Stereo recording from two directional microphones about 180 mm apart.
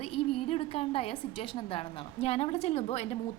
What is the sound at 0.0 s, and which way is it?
A woman's voice, 30° left (ahead or behind).